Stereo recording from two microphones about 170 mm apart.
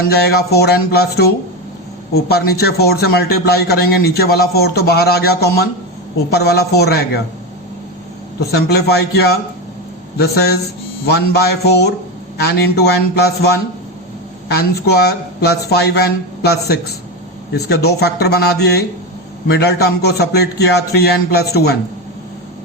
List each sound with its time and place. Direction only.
0.0 s a man's voice: 70° left (ahead or behind)
8.5 s a man's voice: 70° left (ahead or behind)